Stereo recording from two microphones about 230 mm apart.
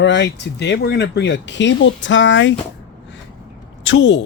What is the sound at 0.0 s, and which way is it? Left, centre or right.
Speech, left.